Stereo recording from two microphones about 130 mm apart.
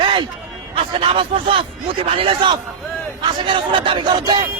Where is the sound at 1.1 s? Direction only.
45° right (ahead or behind).